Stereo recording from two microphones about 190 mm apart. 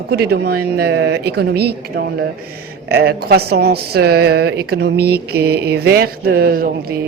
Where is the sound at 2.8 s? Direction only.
55° right (ahead or behind).